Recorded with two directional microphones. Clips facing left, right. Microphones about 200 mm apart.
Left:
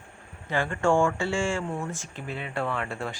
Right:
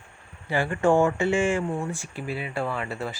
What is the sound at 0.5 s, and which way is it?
Speech, 15° right (ahead or behind).